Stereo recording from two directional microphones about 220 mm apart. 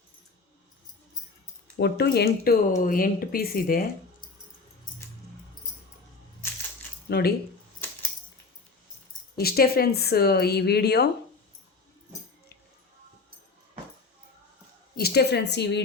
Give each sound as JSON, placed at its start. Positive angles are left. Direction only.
{"t": 1.7, "sound": "speech", "side_deg": 45}
{"t": 7.1, "sound": "speech", "side_deg": 45}
{"t": 9.3, "sound": "speech", "side_deg": 45}
{"t": 14.9, "sound": "speech", "side_deg": 45}